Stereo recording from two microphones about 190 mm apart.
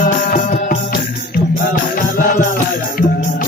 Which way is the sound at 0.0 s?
45° left (ahead or behind).